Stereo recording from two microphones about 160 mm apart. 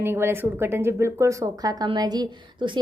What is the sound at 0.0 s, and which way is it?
A woman's voice, 15° right (ahead or behind).